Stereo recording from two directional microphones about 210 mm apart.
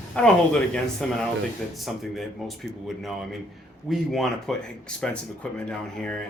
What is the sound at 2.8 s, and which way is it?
Speech, centre (ahead or behind).